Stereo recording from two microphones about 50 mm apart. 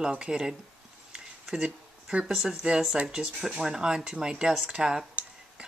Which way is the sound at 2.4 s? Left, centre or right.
Centre.